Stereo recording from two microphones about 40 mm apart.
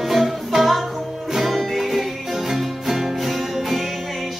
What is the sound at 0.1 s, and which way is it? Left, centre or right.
Music, centre.